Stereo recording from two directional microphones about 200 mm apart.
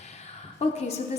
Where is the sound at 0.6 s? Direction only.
35° left (ahead or behind).